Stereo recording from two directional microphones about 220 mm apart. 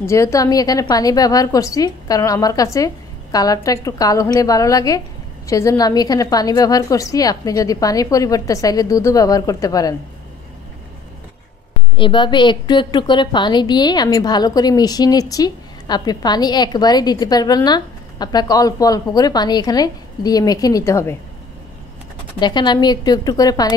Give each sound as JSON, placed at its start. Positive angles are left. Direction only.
{"t": 0.0, "sound": "a woman's voice", "side_deg": 15}
{"t": 12.0, "sound": "a woman's voice", "side_deg": 20}
{"t": 22.4, "sound": "a woman's voice", "side_deg": 20}